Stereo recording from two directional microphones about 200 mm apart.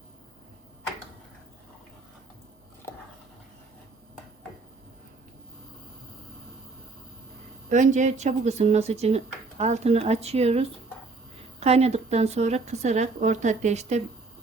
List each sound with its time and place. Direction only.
7.7 s speech: 35° right (ahead or behind)